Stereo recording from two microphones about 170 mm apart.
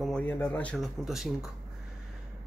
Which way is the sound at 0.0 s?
5° left (ahead or behind).